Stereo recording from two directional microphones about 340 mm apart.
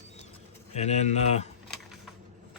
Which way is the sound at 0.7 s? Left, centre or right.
Centre.